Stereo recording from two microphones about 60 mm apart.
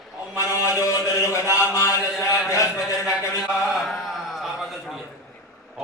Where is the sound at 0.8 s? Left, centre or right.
Left.